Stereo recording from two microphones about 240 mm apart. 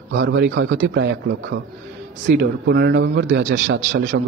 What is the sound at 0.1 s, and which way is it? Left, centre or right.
A man's voice, right.